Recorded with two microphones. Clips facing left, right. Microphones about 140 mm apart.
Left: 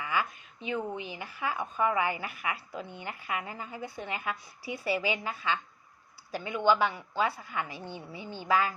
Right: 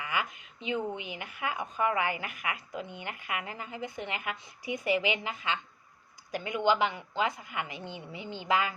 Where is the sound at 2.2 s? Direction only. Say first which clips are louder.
Left 1 dB; 35° left (ahead or behind).